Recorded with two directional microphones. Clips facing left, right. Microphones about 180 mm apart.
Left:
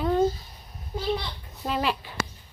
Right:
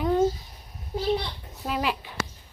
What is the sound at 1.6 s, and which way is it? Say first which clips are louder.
Speech: left 1 dB; 10° right (ahead or behind).